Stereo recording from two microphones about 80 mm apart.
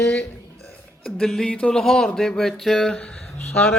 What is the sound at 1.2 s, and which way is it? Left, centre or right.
Speech, centre.